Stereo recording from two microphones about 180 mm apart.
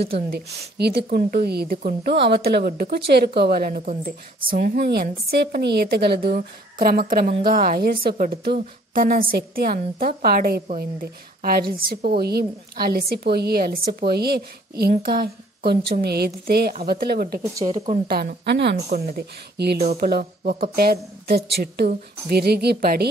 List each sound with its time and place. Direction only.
0.1 s a woman's voice: 60° right (ahead or behind)
17.6 s speech: 35° right (ahead or behind)
18.0 s a woman's voice: 60° right (ahead or behind)